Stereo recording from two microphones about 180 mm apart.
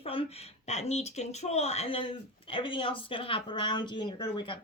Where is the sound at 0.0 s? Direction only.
30° left (ahead or behind).